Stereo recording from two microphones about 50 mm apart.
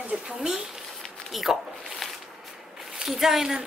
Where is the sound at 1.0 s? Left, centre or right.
Centre.